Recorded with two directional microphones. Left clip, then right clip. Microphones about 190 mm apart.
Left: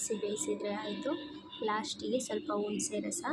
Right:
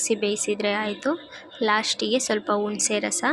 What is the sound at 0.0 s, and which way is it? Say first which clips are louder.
A woman's voice: right 11 dB; 25° right (ahead or behind).